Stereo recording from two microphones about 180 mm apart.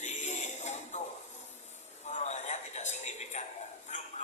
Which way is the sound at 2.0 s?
40° left (ahead or behind).